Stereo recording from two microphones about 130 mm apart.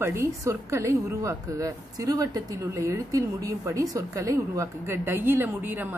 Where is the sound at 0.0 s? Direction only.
20° right (ahead or behind).